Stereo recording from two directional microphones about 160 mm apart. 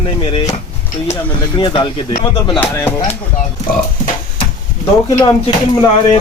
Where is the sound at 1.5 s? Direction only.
30° left (ahead or behind).